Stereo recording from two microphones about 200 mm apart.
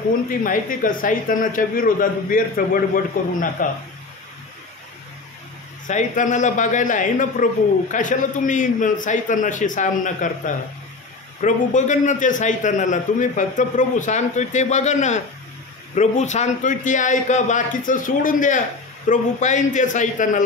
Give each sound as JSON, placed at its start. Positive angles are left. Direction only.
{"t": 0.4, "sound": "a man's voice", "side_deg": 45}
{"t": 5.9, "sound": "a man's voice", "side_deg": 40}